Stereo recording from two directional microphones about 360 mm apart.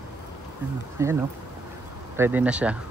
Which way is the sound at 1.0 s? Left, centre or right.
Centre.